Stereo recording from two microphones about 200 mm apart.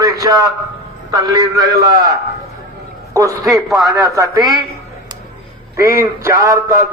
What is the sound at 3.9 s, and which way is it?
Speech, 15° right (ahead or behind).